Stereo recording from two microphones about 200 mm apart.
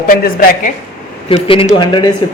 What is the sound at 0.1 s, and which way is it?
Speech, 45° left (ahead or behind).